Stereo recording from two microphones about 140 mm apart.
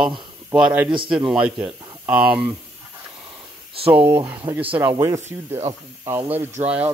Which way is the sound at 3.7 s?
40° right (ahead or behind).